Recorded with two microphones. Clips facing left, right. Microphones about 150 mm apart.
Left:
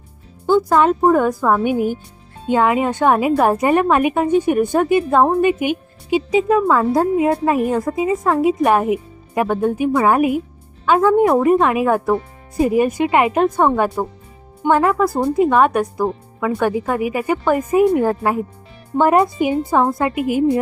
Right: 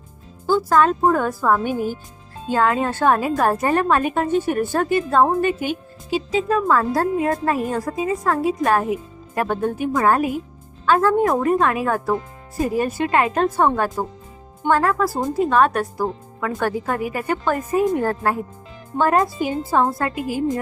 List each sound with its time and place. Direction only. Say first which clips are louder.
0.4 s a woman's voice: left 3 dB; 20° left (ahead or behind)